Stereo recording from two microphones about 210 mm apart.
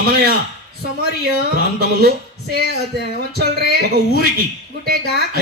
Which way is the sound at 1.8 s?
45° right (ahead or behind).